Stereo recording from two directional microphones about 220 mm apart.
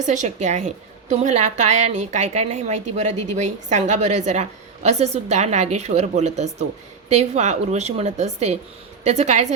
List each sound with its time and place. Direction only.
0.0 s a woman's voice: 35° right (ahead or behind)